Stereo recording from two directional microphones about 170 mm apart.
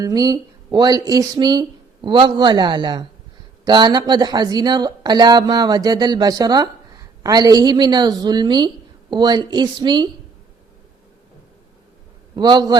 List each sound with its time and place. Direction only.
0.0 s speech: 20° right (ahead or behind)
12.4 s speech: 25° right (ahead or behind)